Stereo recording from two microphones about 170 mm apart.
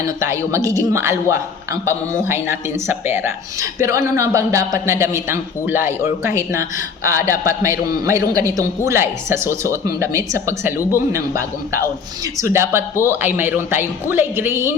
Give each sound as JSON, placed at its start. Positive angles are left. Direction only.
{"t": 0.0, "sound": "speech", "side_deg": -15}